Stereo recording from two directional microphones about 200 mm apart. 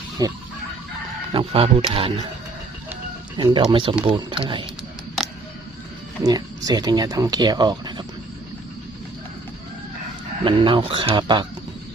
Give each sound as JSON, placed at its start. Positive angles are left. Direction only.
{"t": 0.2, "sound": "speech", "side_deg": -20}
{"t": 3.3, "sound": "speech", "side_deg": -25}
{"t": 6.2, "sound": "speech", "side_deg": -20}
{"t": 10.4, "sound": "speech", "side_deg": -25}